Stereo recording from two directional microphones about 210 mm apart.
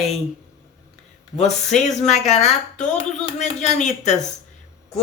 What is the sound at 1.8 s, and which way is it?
Speech, 35° left (ahead or behind).